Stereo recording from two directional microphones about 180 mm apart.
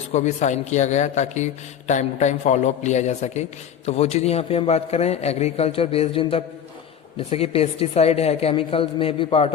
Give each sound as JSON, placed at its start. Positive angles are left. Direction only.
{"t": 0.1, "sound": "a man's voice", "side_deg": 40}